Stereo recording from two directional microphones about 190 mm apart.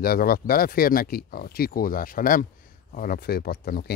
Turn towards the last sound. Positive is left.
turn(degrees=55)  # may be behind; listen again after turning